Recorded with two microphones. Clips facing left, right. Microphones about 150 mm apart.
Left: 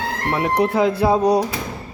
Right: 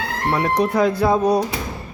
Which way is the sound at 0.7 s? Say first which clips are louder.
Even; 25° left (ahead or behind).